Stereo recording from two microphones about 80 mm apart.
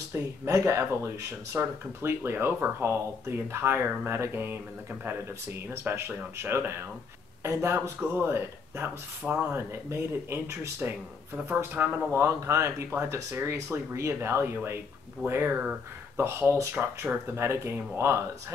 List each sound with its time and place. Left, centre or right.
0.1 s speech: right
5.7 s speech: right
16.7 s speech: right
17.4 s speech: right